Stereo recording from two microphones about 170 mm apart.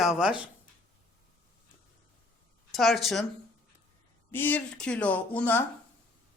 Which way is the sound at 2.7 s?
Centre (ahead or behind).